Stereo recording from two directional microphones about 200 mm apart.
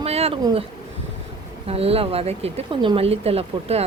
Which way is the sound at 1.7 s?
30° right (ahead or behind).